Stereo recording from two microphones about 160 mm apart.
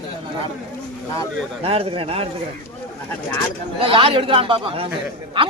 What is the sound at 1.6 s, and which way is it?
Speech, 35° right (ahead or behind).